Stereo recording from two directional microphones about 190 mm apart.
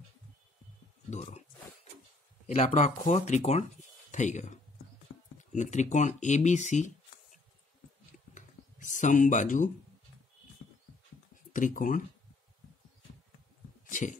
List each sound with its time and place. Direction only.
1.1 s speech: 35° left (ahead or behind)
2.4 s speech: 40° left (ahead or behind)
8.4 s computer keyboard: 40° left (ahead or behind)
11.5 s speech: 45° left (ahead or behind)
13.8 s a sound: 45° left (ahead or behind)